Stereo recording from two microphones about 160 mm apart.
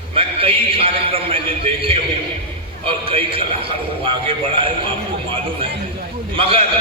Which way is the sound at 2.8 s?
35° right (ahead or behind).